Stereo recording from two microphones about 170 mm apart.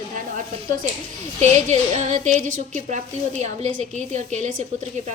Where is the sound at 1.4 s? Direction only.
45° right (ahead or behind).